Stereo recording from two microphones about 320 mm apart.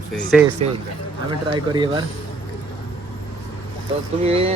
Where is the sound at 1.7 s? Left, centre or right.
Centre.